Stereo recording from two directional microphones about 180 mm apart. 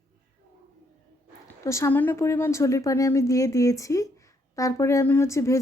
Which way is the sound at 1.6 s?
15° left (ahead or behind).